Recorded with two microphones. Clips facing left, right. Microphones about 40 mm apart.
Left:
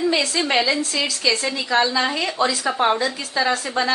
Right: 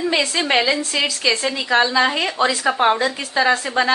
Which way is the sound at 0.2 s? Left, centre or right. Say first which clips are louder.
Right 2 dB; right.